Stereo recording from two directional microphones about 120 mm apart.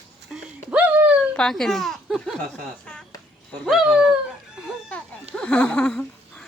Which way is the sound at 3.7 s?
5° right (ahead or behind).